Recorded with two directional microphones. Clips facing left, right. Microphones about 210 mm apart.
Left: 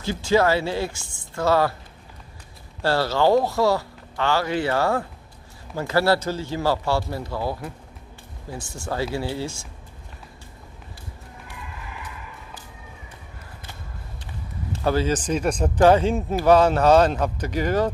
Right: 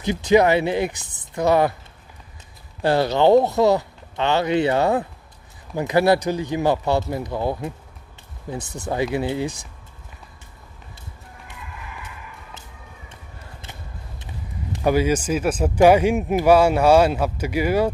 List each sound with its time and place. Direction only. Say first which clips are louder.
0.0 s speech: right 4 dB; 20° right (ahead or behind)
2.8 s speech: right 3 dB; 20° right (ahead or behind)
14.2 s speech: right 1 dB; 15° right (ahead or behind)